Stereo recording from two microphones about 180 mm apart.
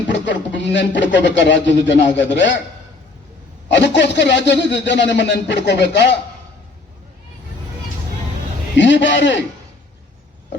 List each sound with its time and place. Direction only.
0.1 s speech: 80° left
3.7 s speech: 75° left (ahead or behind)
8.7 s a man's voice: 80° left